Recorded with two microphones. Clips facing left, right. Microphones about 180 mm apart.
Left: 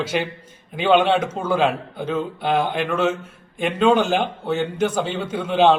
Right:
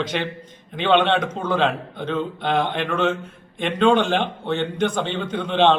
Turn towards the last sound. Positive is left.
turn(degrees=5)  # may be behind; listen again after turning